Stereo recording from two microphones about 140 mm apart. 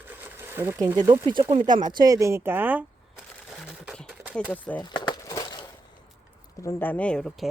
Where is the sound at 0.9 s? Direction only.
25° right (ahead or behind).